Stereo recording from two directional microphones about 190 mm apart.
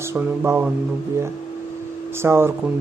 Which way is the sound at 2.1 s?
15° right (ahead or behind).